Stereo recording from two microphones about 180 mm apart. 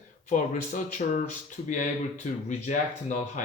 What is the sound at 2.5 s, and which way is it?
Speech, 45° left (ahead or behind).